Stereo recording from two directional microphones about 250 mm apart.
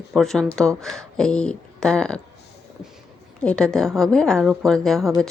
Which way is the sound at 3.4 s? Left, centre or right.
Centre.